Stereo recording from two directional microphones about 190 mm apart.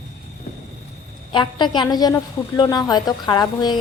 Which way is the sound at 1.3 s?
25° left (ahead or behind).